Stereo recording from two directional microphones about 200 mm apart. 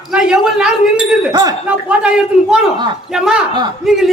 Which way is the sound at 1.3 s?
20° right (ahead or behind).